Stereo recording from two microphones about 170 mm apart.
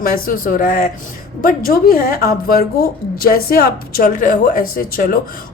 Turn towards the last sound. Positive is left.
turn(degrees=55)  # may be behind; listen again after turning